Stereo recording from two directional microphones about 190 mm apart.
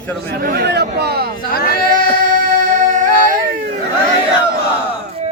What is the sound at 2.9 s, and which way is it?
Music, 45° right (ahead or behind).